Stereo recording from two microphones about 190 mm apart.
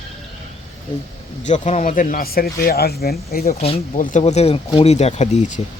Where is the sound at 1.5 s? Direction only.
40° left (ahead or behind); by 3.4 s 55° left (ahead or behind).